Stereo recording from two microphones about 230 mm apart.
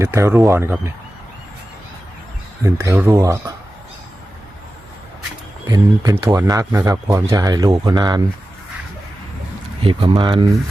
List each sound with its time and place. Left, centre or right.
0.0 s speech: centre
2.6 s speech: centre
5.6 s speech: centre
9.8 s speech: right